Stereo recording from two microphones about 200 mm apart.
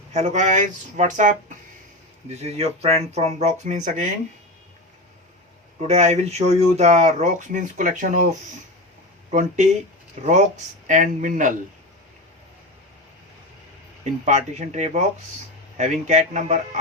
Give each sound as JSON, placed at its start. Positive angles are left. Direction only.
{"t": 0.1, "sound": "speech", "side_deg": -35}
{"t": 5.8, "sound": "speech", "side_deg": -35}
{"t": 14.0, "sound": "speech", "side_deg": -35}